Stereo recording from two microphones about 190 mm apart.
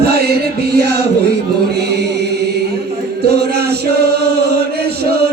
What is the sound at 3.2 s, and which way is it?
Chant, 60° right (ahead or behind).